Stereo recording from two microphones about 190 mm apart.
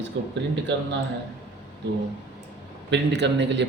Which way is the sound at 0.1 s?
75° right (ahead or behind).